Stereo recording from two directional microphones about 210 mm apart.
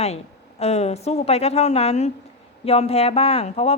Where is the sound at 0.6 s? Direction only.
30° left (ahead or behind).